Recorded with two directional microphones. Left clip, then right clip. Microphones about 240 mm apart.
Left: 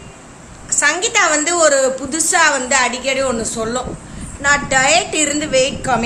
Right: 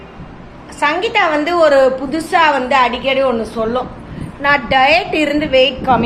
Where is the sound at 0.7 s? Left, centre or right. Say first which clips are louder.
Right 1 dB; centre.